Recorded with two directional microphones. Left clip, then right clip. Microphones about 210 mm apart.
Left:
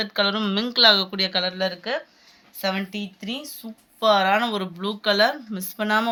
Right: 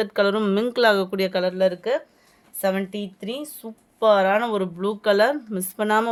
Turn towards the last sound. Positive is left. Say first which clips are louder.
# right 1 dB
turn(degrees=-55)  # may be behind; listen again after turning